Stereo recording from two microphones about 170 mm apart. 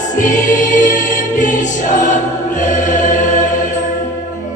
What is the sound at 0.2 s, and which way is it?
Music, 50° left (ahead or behind).